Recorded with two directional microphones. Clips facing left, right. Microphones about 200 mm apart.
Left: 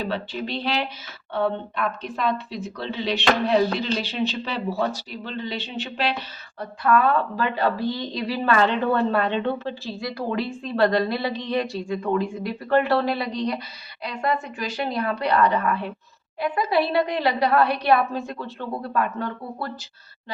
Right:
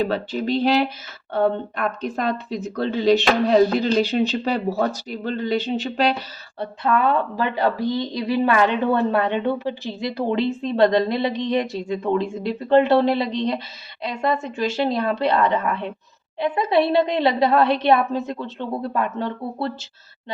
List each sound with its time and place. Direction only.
0.1 s speech: 40° right (ahead or behind)
6.6 s speech: 20° right (ahead or behind)